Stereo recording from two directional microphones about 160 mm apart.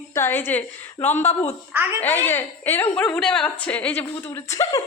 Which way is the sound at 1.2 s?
45° left (ahead or behind).